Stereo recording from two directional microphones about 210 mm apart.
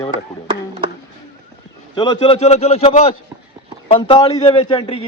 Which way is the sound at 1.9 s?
25° left (ahead or behind).